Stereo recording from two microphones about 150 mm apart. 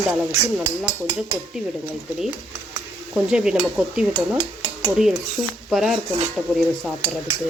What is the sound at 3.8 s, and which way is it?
Dishes, 10° right (ahead or behind).